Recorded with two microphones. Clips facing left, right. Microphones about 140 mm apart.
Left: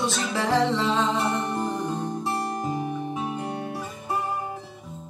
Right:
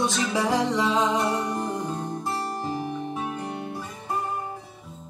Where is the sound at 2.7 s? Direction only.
20° left (ahead or behind).